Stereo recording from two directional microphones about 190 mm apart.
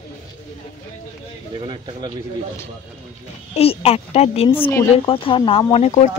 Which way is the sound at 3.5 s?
30° left (ahead or behind).